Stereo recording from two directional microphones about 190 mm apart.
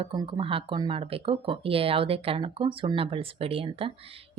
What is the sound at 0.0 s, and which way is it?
Speech, 25° right (ahead or behind).